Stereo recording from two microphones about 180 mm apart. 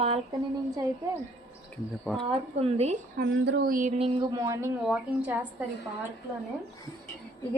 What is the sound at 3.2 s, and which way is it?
Speech, 85° right.